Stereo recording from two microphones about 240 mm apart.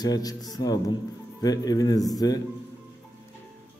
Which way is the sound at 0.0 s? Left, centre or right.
Centre.